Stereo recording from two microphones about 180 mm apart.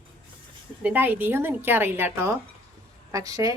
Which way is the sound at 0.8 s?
10° right (ahead or behind).